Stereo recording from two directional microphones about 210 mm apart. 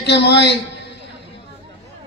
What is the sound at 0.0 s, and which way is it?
Speech, 55° left (ahead or behind).